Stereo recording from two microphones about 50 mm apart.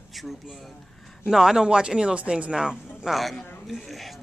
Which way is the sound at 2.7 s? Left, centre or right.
Centre.